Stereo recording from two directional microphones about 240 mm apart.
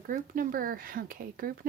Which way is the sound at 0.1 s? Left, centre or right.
Right.